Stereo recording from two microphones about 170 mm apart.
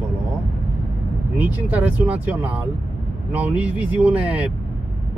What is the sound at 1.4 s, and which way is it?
Speech, 10° right (ahead or behind).